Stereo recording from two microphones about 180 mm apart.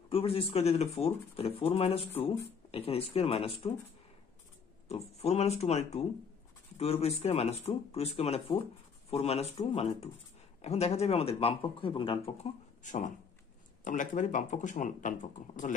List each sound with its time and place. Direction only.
0.1 s speech: 30° left (ahead or behind)
4.8 s speech: 35° left (ahead or behind)
12.8 s speech: 45° left (ahead or behind)